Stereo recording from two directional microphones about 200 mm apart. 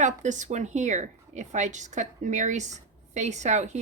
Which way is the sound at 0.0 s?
35° right (ahead or behind).